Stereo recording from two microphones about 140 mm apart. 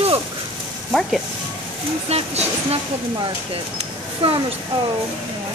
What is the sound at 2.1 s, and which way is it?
Speech, 45° right (ahead or behind).